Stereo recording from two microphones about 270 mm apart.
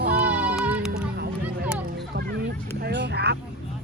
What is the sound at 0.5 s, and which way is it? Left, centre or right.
Music, centre.